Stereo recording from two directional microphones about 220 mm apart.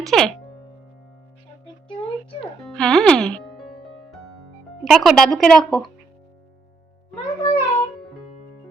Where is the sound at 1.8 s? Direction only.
25° left (ahead or behind).